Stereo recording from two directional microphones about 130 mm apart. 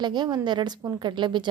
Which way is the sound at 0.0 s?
35° right (ahead or behind).